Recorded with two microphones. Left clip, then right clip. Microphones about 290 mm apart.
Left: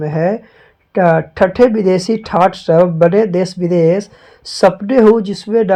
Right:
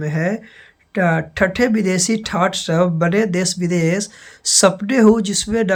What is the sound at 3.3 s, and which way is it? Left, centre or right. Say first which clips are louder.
Speech: left 5 dB; centre.